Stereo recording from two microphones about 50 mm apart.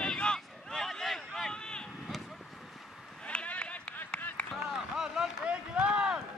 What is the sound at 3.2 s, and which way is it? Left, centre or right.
Run, left.